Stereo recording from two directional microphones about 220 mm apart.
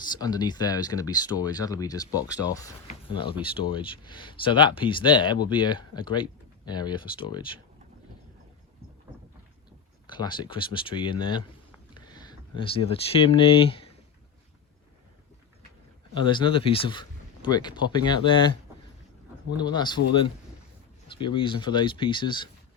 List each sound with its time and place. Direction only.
0.2 s speech: 20° left (ahead or behind)
10.1 s speech: 20° left (ahead or behind)
16.1 s speech: 20° left (ahead or behind)
19.5 s speech: 20° left (ahead or behind)